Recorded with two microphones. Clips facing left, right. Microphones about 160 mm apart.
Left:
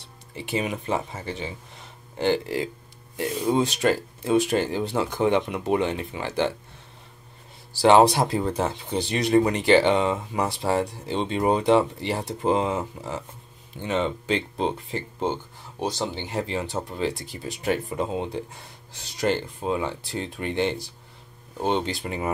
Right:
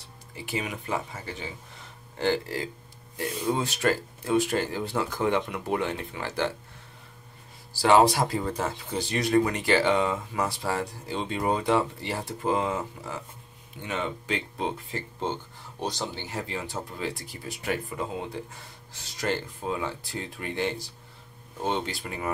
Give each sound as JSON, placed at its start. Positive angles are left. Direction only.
{"t": 0.4, "sound": "speech", "side_deg": 25}
{"t": 8.1, "sound": "speech", "side_deg": 20}